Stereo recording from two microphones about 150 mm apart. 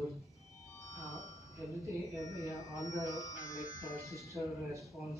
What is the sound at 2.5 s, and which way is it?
Speech, 20° left (ahead or behind).